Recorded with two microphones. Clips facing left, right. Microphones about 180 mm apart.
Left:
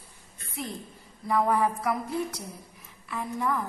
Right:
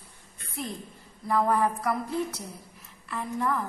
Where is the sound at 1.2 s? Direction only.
Centre (ahead or behind).